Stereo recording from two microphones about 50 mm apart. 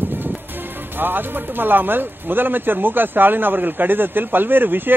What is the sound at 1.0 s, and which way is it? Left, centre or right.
Speech, right.